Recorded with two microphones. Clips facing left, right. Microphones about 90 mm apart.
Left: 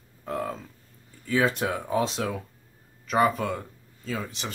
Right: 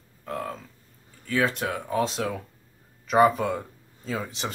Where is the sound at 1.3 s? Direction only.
15° left (ahead or behind).